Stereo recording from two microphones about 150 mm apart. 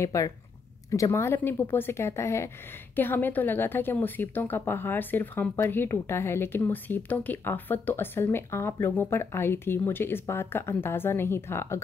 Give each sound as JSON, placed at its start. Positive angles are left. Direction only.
{"t": 0.0, "sound": "a woman's voice", "side_deg": 20}